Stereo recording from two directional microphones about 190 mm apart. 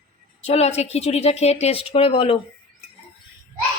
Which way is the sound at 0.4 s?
35° left (ahead or behind).